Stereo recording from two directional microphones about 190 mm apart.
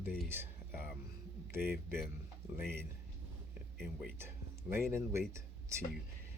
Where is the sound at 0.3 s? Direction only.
10° right (ahead or behind).